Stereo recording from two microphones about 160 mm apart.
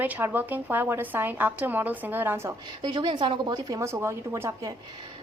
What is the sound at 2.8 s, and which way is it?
A woman's voice, 30° right (ahead or behind).